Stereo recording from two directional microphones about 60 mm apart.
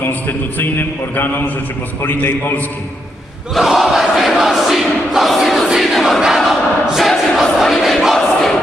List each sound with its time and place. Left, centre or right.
0.1 s a man's voice: left
3.5 s crowd: centre